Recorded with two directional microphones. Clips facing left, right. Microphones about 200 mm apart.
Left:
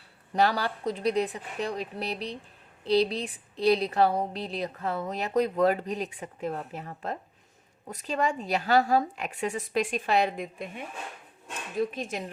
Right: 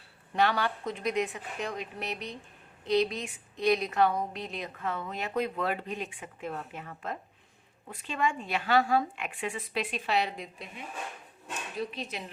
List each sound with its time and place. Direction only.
0.3 s a woman's voice: 35° left (ahead or behind)
11.8 s speech: 50° left (ahead or behind)